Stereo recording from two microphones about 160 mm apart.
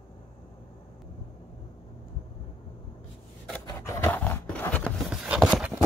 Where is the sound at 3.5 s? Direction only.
15° left (ahead or behind).